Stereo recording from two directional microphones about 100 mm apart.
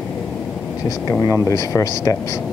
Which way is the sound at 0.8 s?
30° left (ahead or behind).